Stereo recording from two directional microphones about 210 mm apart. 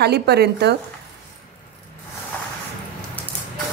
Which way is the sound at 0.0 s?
50° right (ahead or behind).